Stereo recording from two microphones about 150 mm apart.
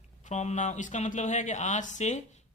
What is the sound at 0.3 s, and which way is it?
A man's voice, 50° left (ahead or behind).